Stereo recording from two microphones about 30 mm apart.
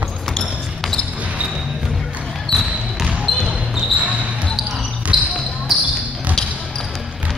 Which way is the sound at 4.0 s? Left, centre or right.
Right.